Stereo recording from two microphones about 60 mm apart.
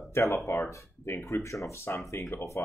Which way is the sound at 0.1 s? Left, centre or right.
Left.